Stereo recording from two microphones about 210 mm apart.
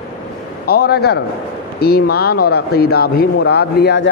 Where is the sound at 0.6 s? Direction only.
50° left (ahead or behind).